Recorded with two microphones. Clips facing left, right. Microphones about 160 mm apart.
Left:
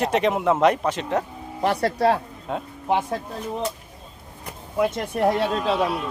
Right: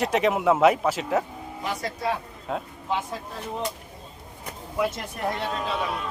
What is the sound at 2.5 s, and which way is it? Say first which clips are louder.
Speech: left 1 dB; centre (ahead or behind).